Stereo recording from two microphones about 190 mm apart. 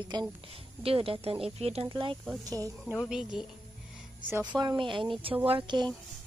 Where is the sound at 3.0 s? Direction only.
5° right (ahead or behind); by 5.8 s 25° right (ahead or behind).